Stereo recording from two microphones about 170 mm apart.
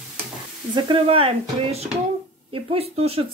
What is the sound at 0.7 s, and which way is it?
Speech, 30° right (ahead or behind).